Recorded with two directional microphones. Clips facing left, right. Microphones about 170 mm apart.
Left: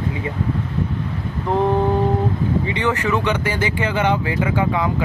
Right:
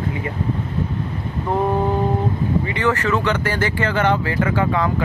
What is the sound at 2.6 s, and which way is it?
Speech, 20° left (ahead or behind).